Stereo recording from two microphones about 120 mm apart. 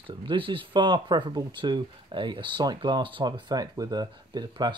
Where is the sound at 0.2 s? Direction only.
45° right (ahead or behind).